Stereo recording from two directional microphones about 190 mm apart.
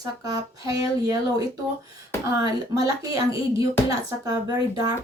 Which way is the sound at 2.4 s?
20° right (ahead or behind).